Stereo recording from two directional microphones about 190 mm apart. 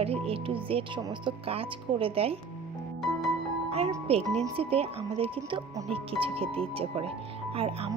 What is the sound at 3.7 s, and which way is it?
Speech, 30° right (ahead or behind).